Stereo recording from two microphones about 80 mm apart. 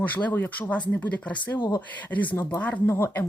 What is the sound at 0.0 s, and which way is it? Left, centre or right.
Speech, centre.